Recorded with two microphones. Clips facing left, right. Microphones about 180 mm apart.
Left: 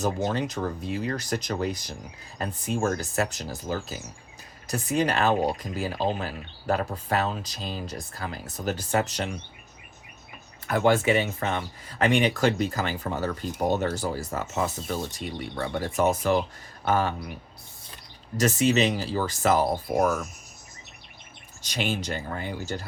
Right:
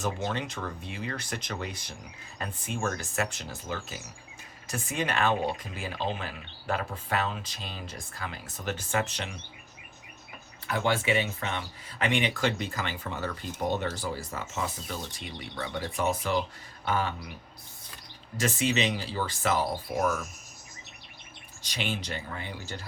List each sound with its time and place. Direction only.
0.0 s speech: 40° left (ahead or behind)
10.7 s speech: 50° left (ahead or behind)
18.3 s speech: 40° left (ahead or behind)
21.6 s speech: 45° left (ahead or behind)